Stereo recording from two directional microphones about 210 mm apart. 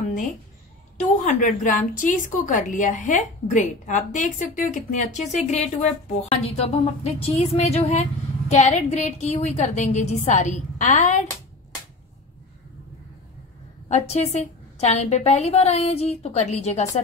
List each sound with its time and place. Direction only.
0.9 s a woman's voice: 40° left (ahead or behind)
13.8 s a woman's voice: 30° left (ahead or behind)